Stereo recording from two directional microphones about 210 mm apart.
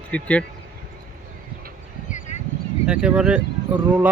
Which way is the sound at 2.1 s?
35° left (ahead or behind).